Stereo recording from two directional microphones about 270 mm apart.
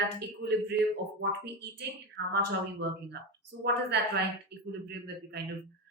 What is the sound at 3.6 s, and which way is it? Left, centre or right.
Speech, right.